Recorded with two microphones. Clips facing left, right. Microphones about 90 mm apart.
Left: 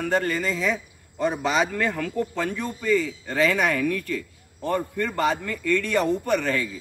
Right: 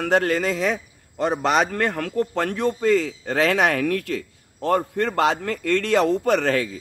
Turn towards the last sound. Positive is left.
turn(degrees=-80)